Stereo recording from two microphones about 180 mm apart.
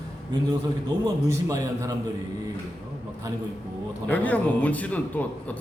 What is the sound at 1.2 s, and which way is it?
Speech, 15° right (ahead or behind).